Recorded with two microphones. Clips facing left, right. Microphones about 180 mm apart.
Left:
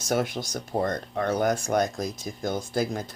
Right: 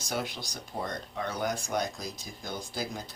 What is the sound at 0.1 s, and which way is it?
Speech, 50° left (ahead or behind).